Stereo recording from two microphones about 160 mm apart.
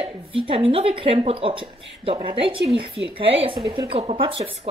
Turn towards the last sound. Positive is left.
turn(degrees=-35)  # may be behind; listen again after turning